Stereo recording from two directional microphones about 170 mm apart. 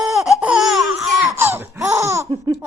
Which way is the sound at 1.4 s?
15° right (ahead or behind).